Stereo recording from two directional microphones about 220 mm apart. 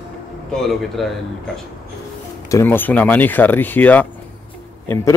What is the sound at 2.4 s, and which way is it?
Speech, 10° left (ahead or behind).